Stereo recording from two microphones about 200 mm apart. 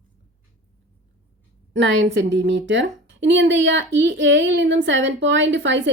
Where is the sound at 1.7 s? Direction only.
65° right (ahead or behind).